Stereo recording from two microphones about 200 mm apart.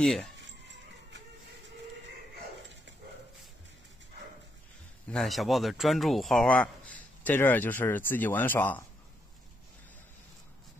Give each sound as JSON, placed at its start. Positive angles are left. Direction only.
{"t": 0.0, "sound": "speech", "side_deg": 0}
{"t": 5.0, "sound": "speech", "side_deg": 0}